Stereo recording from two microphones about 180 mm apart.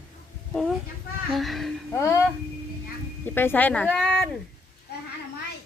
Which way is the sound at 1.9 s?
15° left (ahead or behind).